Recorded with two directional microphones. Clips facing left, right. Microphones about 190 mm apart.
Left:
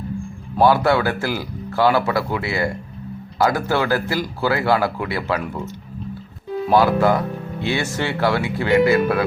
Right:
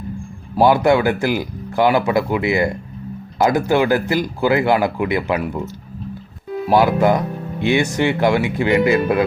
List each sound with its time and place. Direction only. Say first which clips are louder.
0.6 s speech: right 2 dB; 15° right (ahead or behind)
6.7 s speech: right 1 dB; 15° right (ahead or behind)